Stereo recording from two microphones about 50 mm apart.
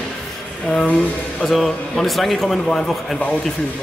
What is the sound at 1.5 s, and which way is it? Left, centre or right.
A man's voice, centre.